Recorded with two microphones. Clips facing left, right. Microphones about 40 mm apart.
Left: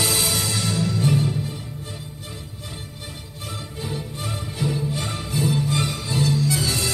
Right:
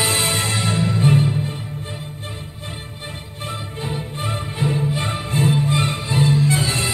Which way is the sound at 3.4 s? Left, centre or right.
Right.